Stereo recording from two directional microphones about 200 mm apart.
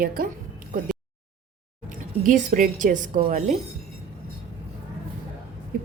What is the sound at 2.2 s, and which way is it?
A woman's voice, 40° right (ahead or behind).